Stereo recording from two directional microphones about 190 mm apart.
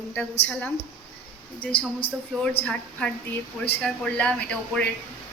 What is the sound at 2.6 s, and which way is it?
A woman's voice, 5° left (ahead or behind).